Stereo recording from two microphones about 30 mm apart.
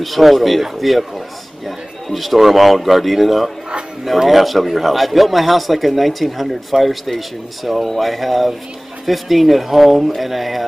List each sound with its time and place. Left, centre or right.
0.0 s speech: centre